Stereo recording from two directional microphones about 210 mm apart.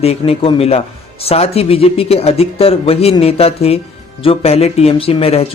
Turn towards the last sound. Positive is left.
turn(degrees=30)  # may be behind; listen again after turning